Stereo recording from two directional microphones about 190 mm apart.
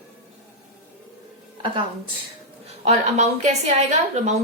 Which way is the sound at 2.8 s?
35° right (ahead or behind).